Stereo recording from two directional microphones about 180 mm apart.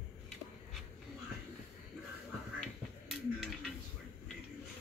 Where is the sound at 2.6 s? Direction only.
Centre (ahead or behind).